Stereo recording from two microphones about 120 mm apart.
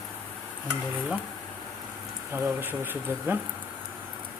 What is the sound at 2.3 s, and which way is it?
Speech, 15° right (ahead or behind).